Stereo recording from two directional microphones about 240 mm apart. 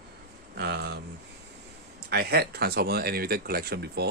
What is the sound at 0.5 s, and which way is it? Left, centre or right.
Speech, right.